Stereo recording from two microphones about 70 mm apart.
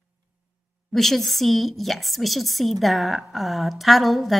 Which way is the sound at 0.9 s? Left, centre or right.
Centre.